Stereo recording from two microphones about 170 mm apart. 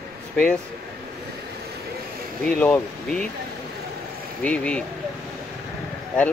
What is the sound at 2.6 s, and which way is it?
Speech, 5° left (ahead or behind).